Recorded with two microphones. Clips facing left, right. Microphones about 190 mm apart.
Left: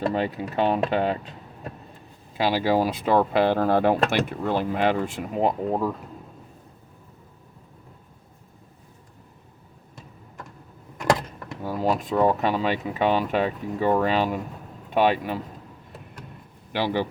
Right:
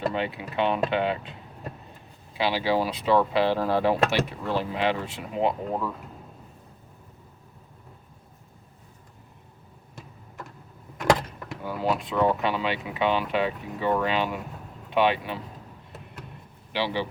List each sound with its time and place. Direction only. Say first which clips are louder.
0.1 s speech: left 4 dB; 45° left (ahead or behind)
2.4 s speech: left 3 dB; 45° left (ahead or behind)
11.6 s speech: left 3 dB; 40° left (ahead or behind)
16.7 s speech: left 3 dB; 50° left (ahead or behind)